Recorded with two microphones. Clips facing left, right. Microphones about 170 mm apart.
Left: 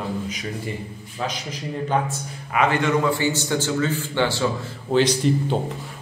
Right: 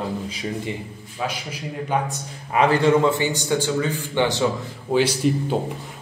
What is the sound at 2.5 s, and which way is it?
Speech, 35° right (ahead or behind).